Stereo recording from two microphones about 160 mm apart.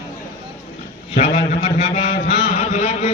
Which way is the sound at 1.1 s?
50° left (ahead or behind).